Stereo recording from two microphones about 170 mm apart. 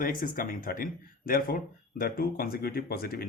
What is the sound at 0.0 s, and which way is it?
Speech, 55° left (ahead or behind).